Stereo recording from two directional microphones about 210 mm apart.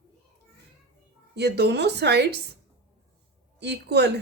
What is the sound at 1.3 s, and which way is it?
Speech, 50° right (ahead or behind).